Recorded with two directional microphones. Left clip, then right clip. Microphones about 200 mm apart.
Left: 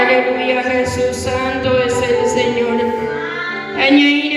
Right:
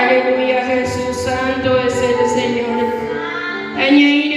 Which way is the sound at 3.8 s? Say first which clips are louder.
Even; 30° left (ahead or behind).